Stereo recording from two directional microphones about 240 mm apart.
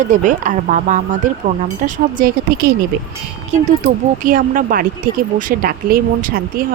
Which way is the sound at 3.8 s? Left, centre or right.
Right.